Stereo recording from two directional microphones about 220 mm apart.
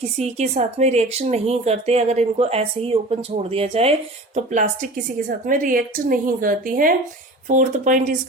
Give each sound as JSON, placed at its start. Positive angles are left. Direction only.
{"t": 0.0, "sound": "a woman's voice", "side_deg": -30}